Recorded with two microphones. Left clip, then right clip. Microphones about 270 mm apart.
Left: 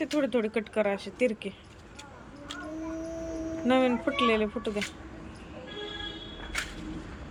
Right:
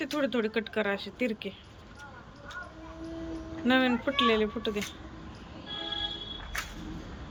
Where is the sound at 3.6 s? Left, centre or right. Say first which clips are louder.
Left 1 dB; centre.